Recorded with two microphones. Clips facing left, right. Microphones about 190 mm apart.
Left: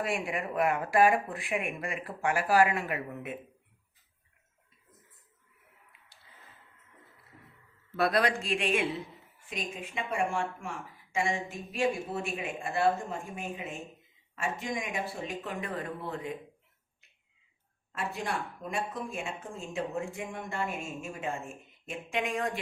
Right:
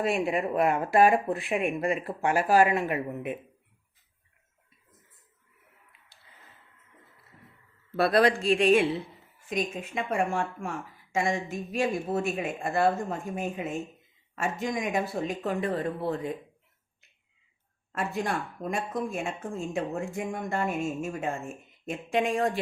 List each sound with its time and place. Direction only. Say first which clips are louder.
0.0 s speech: right 6 dB; 25° right (ahead or behind)
7.9 s speech: right 5 dB; 30° right (ahead or behind)
9.5 s speech: right 7 dB; 45° right (ahead or behind)
18.7 s speech: right 5 dB; 45° right (ahead or behind)
21.8 s speech: right 6 dB; 35° right (ahead or behind)